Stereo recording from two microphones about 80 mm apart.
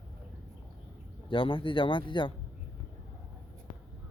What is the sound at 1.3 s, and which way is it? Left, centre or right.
A man's voice, left.